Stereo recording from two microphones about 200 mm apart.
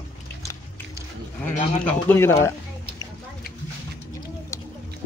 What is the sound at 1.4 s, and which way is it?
Speech, 10° left (ahead or behind).